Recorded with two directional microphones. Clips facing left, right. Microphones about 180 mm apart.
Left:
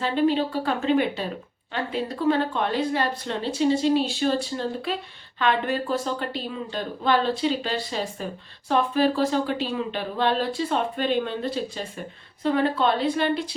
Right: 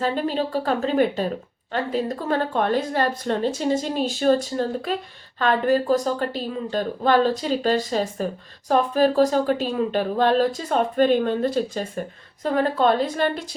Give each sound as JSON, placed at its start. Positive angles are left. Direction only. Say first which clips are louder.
{"t": 0.0, "sound": "speech", "louder": "left 1 dB", "side_deg": -40}